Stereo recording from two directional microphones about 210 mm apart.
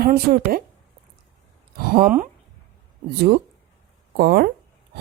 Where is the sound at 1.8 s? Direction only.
45° right (ahead or behind).